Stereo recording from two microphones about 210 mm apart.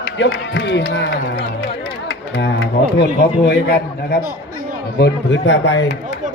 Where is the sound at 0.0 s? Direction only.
55° left (ahead or behind).